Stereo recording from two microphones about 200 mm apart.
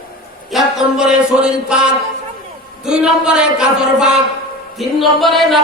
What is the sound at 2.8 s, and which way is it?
A woman's voice, 5° right (ahead or behind).